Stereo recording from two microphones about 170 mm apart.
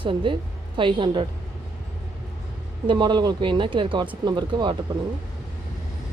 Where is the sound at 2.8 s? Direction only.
25° right (ahead or behind).